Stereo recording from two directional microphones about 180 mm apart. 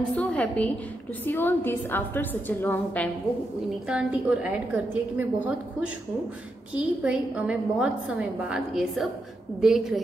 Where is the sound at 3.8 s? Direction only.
5° right (ahead or behind).